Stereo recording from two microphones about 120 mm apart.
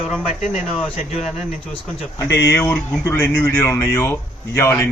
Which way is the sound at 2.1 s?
25° left (ahead or behind).